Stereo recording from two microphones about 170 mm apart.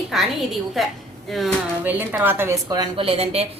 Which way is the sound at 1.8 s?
10° right (ahead or behind).